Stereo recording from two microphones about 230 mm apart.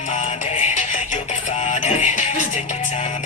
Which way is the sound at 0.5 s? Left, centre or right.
Left.